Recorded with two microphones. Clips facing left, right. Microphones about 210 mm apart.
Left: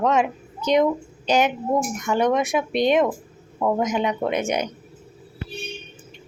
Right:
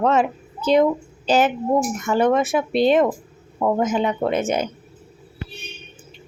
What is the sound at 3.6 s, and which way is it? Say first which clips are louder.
Speech: right 2 dB; 5° right (ahead or behind).